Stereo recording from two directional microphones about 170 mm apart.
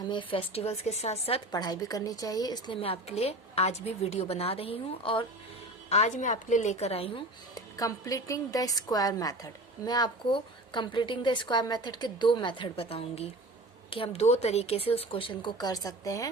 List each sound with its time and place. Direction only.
0.1 s speech: 30° left (ahead or behind)
5.9 s speech: 45° left (ahead or behind)
7.5 s a woman's voice: 20° left (ahead or behind)